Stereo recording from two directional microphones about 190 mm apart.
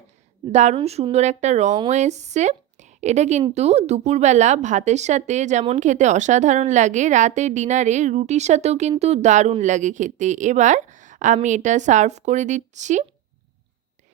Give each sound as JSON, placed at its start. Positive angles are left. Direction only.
{"t": 0.5, "sound": "a woman's voice", "side_deg": -35}